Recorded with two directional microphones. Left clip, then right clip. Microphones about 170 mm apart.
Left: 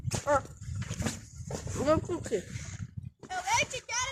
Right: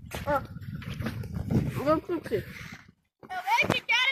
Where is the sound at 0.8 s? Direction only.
40° left (ahead or behind).